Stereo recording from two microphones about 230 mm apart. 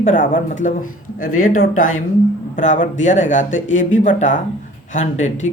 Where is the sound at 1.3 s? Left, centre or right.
Left.